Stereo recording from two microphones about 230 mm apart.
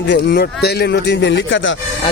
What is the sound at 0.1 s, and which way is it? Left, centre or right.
Speech, left.